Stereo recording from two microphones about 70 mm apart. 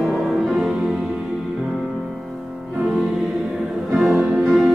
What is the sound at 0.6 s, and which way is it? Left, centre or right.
Music, centre.